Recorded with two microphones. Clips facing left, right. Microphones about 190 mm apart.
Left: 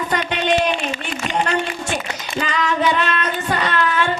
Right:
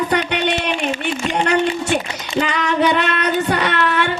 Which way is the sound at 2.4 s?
65° right (ahead or behind).